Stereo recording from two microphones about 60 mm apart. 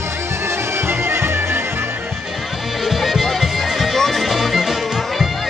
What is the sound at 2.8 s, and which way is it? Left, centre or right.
Music, centre.